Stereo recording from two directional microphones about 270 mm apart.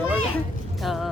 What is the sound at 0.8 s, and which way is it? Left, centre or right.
Speech, centre.